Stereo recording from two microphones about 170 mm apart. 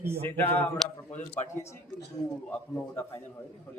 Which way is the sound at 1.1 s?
40° left (ahead or behind).